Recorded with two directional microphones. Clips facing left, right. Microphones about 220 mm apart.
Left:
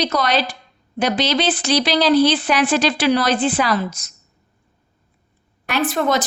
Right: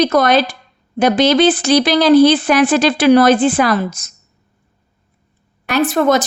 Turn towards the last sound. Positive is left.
turn(degrees=-45)  # may be behind; listen again after turning